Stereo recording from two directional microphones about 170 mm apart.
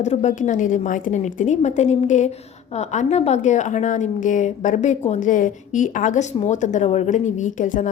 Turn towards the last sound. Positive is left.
turn(degrees=45)  # may be behind; listen again after turning